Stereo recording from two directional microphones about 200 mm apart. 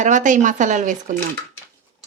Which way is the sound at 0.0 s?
40° right (ahead or behind).